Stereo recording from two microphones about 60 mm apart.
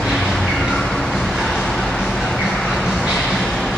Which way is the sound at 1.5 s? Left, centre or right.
Centre.